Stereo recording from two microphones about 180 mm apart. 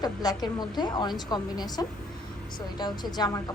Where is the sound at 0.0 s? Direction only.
20° left (ahead or behind).